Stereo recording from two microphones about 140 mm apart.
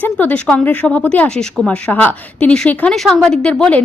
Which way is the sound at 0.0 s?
10° left (ahead or behind).